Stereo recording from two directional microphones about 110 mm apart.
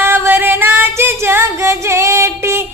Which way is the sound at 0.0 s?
20° right (ahead or behind).